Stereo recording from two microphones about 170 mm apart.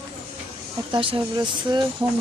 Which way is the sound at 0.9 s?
30° right (ahead or behind).